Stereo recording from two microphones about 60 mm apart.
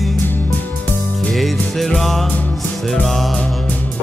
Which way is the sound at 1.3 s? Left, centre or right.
Centre.